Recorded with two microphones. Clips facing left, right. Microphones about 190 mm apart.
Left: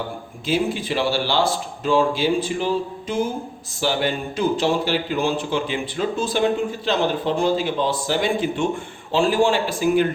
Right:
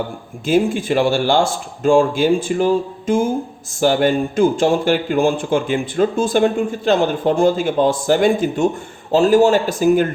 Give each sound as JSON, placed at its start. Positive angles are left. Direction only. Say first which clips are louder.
{"t": 0.4, "sound": "speech", "louder": "right 6 dB", "side_deg": -50}